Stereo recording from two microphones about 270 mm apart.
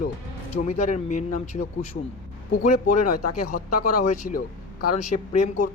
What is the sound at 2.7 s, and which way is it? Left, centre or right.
Speech, left.